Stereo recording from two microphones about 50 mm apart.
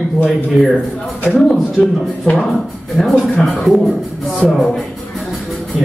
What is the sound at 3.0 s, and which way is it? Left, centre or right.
Speech, centre.